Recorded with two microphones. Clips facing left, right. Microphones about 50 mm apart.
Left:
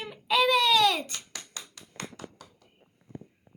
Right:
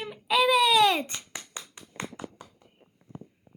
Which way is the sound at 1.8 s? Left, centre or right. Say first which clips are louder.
Right 4 dB; right.